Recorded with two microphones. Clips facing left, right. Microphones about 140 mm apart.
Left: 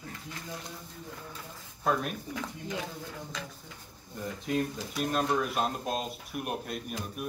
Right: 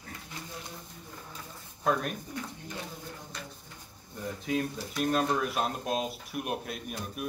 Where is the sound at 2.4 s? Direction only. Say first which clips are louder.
Left 3 dB; 90° left.